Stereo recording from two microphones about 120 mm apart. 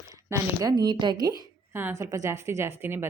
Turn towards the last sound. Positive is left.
turn(degrees=-20)  # may be behind; listen again after turning